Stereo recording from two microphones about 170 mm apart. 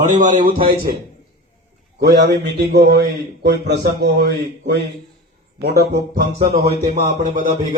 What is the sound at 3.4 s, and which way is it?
A man's voice, 80° right.